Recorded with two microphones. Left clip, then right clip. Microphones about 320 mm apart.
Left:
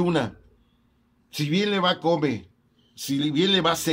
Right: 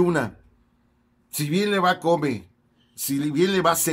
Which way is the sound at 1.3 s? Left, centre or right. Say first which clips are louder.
Right 1 dB; centre.